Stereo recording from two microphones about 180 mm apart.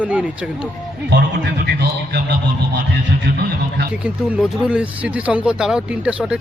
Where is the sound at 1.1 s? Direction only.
65° right (ahead or behind).